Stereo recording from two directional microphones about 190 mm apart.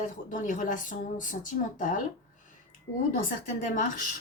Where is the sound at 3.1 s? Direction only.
40° left (ahead or behind).